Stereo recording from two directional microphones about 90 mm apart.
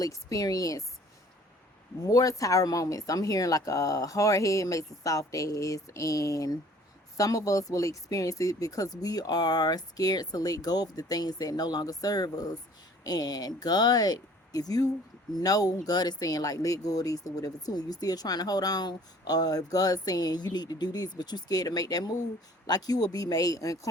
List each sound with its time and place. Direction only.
0.0 s speech: 40° left (ahead or behind)
2.0 s speech: 40° left (ahead or behind)